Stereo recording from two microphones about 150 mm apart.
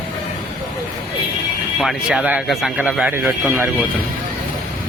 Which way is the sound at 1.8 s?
Centre (ahead or behind).